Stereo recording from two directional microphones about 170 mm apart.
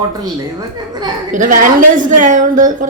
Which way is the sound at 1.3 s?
50° right (ahead or behind).